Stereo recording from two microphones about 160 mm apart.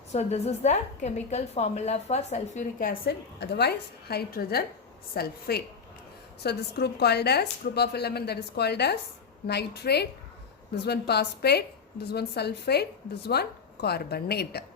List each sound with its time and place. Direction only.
0.1 s a woman's voice: 45° left (ahead or behind); by 5.6 s 75° left (ahead or behind)
6.4 s a woman's voice: 90° left